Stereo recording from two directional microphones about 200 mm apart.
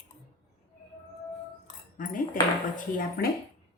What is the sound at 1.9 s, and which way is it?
Speech, 45° left (ahead or behind).